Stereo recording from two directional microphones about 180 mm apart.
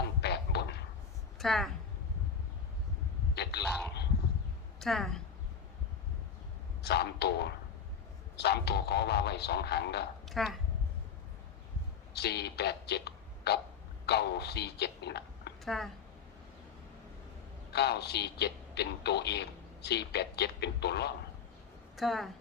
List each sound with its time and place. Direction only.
0.0 s a sound: 65° left (ahead or behind)
1.4 s speech: centre (ahead or behind)
3.3 s a sound: 65° left (ahead or behind)
4.8 s a woman's voice: centre (ahead or behind)
6.8 s a man's voice: 65° left (ahead or behind)
10.2 s a woman's voice: centre (ahead or behind)
12.1 s a man's voice: 65° left (ahead or behind)
15.6 s a woman's voice: centre (ahead or behind)
17.7 s a man's voice: 65° left (ahead or behind)
21.9 s a woman's voice: centre (ahead or behind)